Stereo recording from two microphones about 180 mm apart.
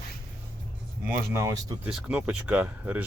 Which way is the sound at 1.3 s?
15° right (ahead or behind).